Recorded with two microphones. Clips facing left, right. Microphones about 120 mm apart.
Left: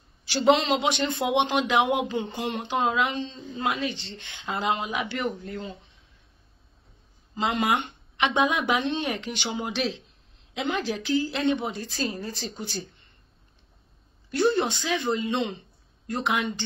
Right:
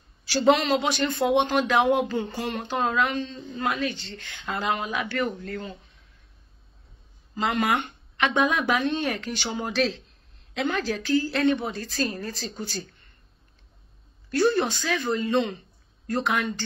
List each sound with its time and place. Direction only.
0.3 s speech: 25° left (ahead or behind)
7.3 s a woman's voice: 20° left (ahead or behind)
14.3 s a woman's voice: 20° left (ahead or behind)